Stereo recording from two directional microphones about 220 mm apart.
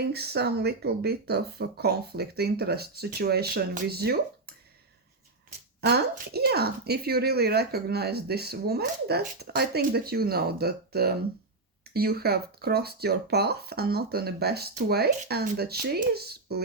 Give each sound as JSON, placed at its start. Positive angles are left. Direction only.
{"t": 0.1, "sound": "speech", "side_deg": -45}
{"t": 5.8, "sound": "speech", "side_deg": -45}